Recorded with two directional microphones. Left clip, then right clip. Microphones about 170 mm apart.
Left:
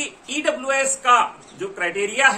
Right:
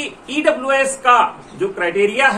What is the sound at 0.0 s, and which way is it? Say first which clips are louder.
A woman's voice: right 6 dB; 20° left (ahead or behind).